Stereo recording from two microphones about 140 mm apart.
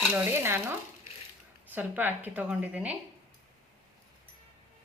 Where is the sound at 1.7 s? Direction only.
15° right (ahead or behind).